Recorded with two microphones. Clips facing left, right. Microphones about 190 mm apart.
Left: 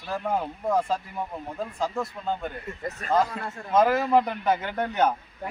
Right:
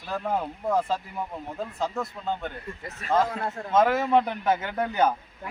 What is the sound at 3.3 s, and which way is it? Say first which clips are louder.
Speech: right 4 dB; 40° right (ahead or behind).